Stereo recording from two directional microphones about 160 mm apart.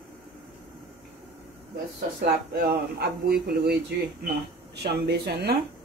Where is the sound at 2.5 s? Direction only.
75° right (ahead or behind).